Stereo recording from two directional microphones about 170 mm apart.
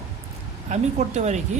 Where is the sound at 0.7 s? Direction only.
40° right (ahead or behind).